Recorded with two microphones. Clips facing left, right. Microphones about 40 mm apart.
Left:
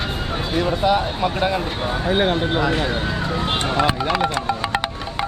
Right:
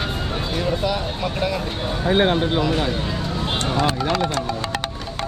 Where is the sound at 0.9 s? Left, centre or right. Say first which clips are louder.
Left 5 dB; left.